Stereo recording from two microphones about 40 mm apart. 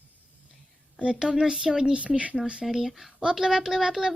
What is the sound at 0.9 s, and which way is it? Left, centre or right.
Speech, right.